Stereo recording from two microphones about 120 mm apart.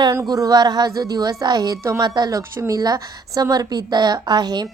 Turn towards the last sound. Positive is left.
turn(degrees=-35)  # may be behind; listen again after turning